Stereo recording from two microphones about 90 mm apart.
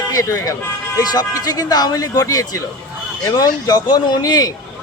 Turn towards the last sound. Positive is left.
turn(degrees=45)  # may be behind; listen again after turning